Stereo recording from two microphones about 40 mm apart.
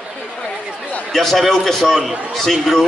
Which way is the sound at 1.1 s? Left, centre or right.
Centre.